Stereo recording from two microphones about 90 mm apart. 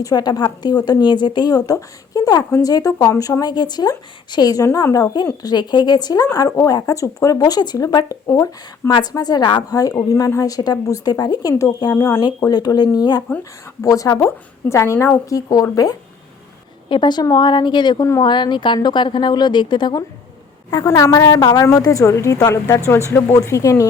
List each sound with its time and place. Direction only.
0.0 s a woman's voice: 45° left (ahead or behind)
3.5 s a woman's voice: 55° left (ahead or behind)
4.6 s a woman's voice: 40° left (ahead or behind)
8.9 s a woman's voice: 50° left (ahead or behind)
13.8 s a woman's voice: 40° left (ahead or behind)
15.3 s a woman's voice: 40° left (ahead or behind)
16.9 s a woman's voice: 55° left (ahead or behind)
20.8 s a woman's voice: 35° left (ahead or behind)